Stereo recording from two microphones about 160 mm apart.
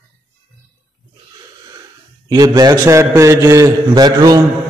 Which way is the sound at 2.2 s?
20° right (ahead or behind).